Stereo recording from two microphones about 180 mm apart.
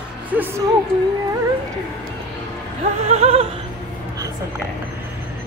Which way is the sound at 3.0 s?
35° right (ahead or behind).